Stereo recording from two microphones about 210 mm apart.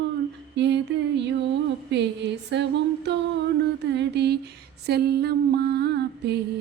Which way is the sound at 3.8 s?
55° right (ahead or behind).